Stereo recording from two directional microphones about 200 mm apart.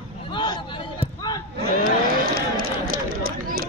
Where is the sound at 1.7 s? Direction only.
45° right (ahead or behind).